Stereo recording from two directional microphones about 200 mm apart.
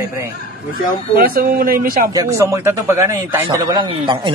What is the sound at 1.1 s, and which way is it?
Speech, 45° right (ahead or behind).